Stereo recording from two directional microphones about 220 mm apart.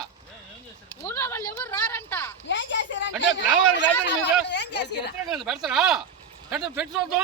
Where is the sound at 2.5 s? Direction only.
55° left (ahead or behind).